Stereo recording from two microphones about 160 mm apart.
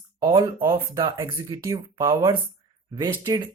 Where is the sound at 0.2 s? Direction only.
30° right (ahead or behind).